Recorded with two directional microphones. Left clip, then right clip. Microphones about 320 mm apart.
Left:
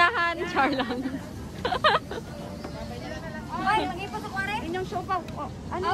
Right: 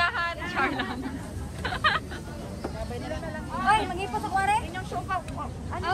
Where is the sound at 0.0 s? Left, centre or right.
Centre.